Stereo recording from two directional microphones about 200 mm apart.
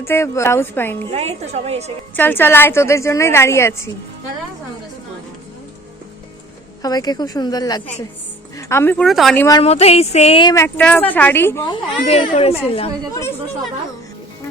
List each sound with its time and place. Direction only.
0.0 s a woman's voice: 10° left (ahead or behind)
1.1 s a woman's voice: 30° right (ahead or behind)
2.1 s a woman's voice: 10° left (ahead or behind)
6.8 s speech: 20° left (ahead or behind); by 9.4 s centre (ahead or behind)
9.4 s speech: 20° left (ahead or behind)
9.6 s a sound: 30° left (ahead or behind)
10.5 s a woman's voice: 10° left (ahead or behind); by 12.9 s 30° left (ahead or behind)